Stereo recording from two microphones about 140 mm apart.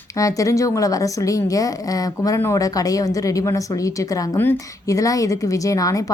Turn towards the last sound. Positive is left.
turn(degrees=25)  # may be behind; listen again after turning